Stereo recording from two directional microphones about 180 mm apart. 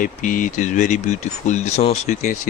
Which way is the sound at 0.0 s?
45° left (ahead or behind).